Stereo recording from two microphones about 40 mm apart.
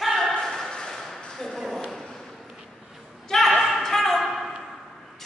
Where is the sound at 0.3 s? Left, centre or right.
Centre.